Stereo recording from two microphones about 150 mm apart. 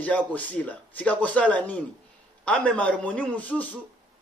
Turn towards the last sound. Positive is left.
turn(degrees=10)  # may be behind; listen again after turning